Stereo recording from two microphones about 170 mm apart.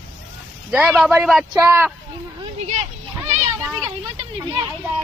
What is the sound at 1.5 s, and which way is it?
Speech, 20° right (ahead or behind).